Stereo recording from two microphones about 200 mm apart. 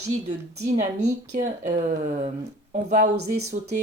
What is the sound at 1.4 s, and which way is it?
Speech, 35° right (ahead or behind).